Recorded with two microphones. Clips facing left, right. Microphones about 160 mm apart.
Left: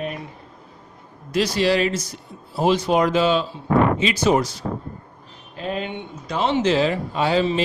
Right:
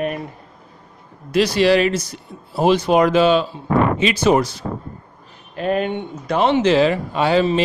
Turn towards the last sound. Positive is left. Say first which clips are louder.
# right 3 dB
turn(degrees=-65)  # may be behind; listen again after turning